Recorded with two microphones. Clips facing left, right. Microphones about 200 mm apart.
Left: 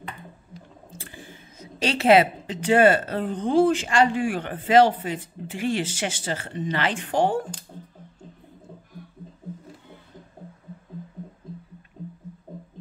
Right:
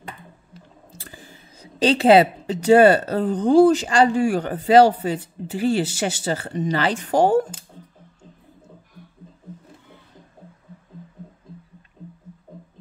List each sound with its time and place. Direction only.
0.9 s speech: 40° right (ahead or behind)